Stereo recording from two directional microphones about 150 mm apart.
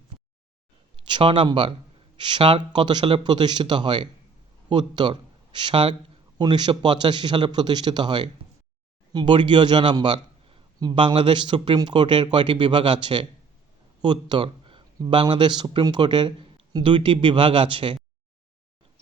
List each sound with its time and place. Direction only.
0.9 s a man's voice: 35° right (ahead or behind)